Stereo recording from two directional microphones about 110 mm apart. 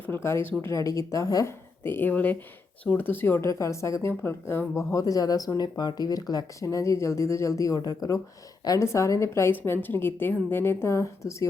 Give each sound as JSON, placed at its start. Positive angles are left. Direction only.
{"t": 0.0, "sound": "speech", "side_deg": 20}
{"t": 1.8, "sound": "speech", "side_deg": 20}